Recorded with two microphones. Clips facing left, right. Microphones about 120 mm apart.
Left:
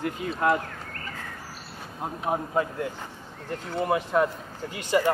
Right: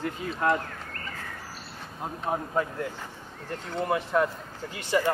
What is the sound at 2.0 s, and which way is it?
Speech, 15° left (ahead or behind).